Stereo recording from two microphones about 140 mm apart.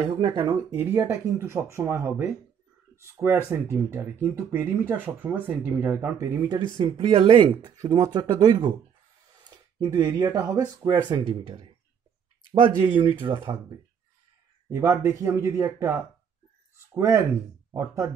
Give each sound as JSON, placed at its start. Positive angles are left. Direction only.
{"t": 0.2, "sound": "speech", "side_deg": -35}
{"t": 0.7, "sound": "speech", "side_deg": -20}
{"t": 6.8, "sound": "speech", "side_deg": -40}
{"t": 9.4, "sound": "a sound", "side_deg": -30}
{"t": 9.9, "sound": "speech", "side_deg": -30}
{"t": 14.7, "sound": "speech", "side_deg": -20}